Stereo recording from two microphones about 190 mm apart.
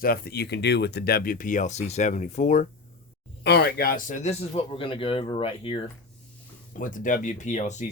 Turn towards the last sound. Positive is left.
turn(degrees=40)  # may be behind; listen again after turning